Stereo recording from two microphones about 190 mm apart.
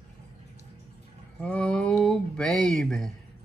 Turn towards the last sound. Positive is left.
turn(degrees=0)  # may be behind; listen again after turning